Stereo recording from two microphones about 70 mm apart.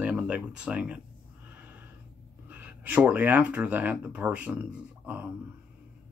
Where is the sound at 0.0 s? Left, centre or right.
Centre.